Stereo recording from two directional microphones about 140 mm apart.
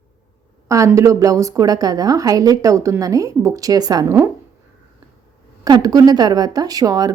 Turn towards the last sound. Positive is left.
turn(degrees=-25)  # may be behind; listen again after turning